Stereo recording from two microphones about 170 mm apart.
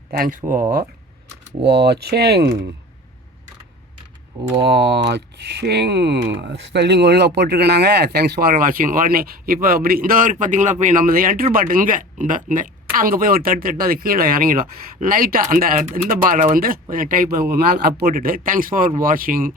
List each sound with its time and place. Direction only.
0.1 s speech: 60° right (ahead or behind)
0.4 s speech: 15° right (ahead or behind)
1.6 s speech: 75° right (ahead or behind)
4.7 s speech: 80° right; by 19.5 s 55° right (ahead or behind)